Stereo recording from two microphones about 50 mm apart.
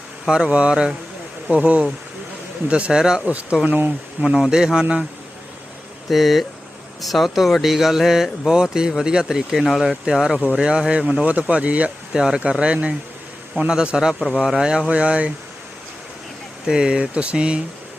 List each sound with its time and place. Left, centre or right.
0.3 s a man's voice: centre
1.5 s a man's voice: right
6.1 s a man's voice: centre; by 11.9 s right
12.1 s a man's voice: centre
14.2 s speech: centre
14.6 s a man's voice: centre
16.6 s speech: centre